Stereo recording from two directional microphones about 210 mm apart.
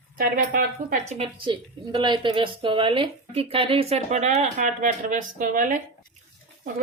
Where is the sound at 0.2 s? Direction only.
40° right (ahead or behind).